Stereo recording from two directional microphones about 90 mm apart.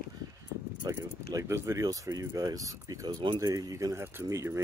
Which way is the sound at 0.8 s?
45° right (ahead or behind).